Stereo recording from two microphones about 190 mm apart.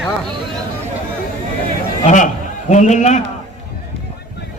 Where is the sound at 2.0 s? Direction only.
40° left (ahead or behind).